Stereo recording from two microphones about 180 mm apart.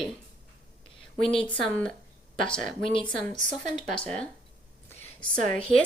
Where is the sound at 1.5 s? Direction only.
10° left (ahead or behind).